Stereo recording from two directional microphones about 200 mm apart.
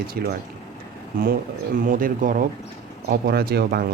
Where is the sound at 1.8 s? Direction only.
45° right (ahead or behind).